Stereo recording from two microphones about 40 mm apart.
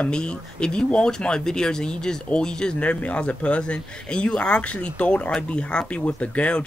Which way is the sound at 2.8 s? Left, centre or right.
Left.